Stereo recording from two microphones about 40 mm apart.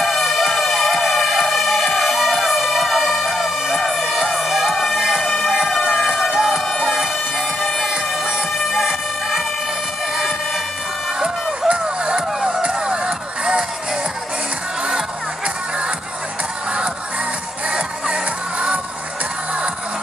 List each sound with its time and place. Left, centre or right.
0.0 s music: centre
5.9 s siren: centre
8.1 s emergency vehicle: centre
10.1 s vehicle: centre
11.8 s a sound: right
12.6 s music: right
17.7 s music: right